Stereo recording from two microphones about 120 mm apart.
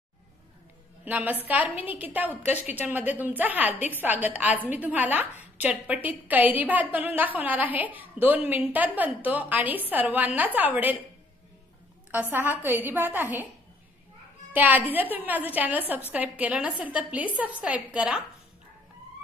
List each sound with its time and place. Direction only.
1.1 s a woman's voice: 15° right (ahead or behind)
12.1 s a woman's voice: 15° right (ahead or behind)
14.5 s a woman's voice: 15° right (ahead or behind)